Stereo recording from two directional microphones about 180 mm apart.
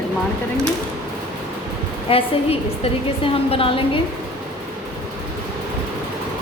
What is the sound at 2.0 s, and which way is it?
A woman's voice, 30° left (ahead or behind).